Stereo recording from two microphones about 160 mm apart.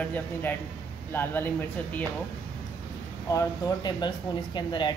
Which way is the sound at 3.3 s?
25° left (ahead or behind).